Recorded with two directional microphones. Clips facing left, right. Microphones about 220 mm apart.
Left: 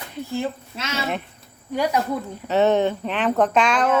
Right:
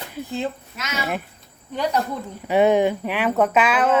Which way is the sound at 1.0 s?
5° right (ahead or behind).